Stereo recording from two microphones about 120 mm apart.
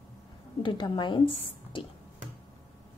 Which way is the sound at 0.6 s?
40° left (ahead or behind).